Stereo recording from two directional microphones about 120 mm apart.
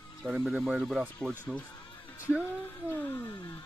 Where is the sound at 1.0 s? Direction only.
15° right (ahead or behind).